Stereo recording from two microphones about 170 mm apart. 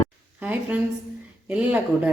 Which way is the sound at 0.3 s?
10° right (ahead or behind).